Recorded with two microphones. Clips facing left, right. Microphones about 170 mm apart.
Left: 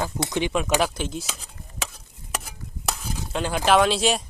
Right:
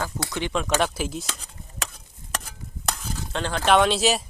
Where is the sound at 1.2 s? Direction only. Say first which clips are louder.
Even; 5° left (ahead or behind).